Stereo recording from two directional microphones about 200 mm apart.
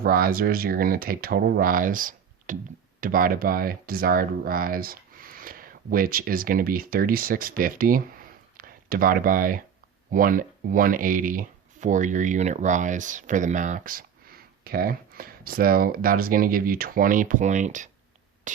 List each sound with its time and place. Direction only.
0.0 s speech: 45° right (ahead or behind)
18.5 s beatboxing: 40° right (ahead or behind)